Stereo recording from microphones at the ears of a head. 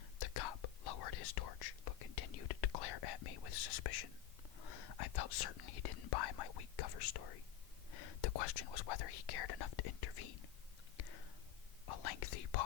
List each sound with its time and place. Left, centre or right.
0.2 s whispering: left